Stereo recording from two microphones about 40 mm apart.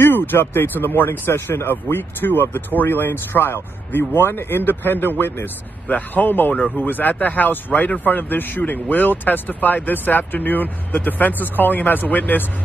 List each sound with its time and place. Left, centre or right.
0.0 s speech: left
5.9 s speech: left
6.2 s speech: left